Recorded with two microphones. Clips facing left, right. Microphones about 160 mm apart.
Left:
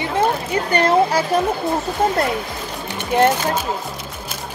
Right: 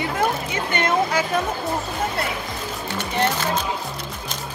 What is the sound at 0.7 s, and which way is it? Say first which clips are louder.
Speech: left 5 dB; 35° left (ahead or behind).